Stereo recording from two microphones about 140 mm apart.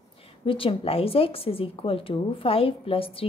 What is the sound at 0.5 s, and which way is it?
A woman's voice, 40° left (ahead or behind).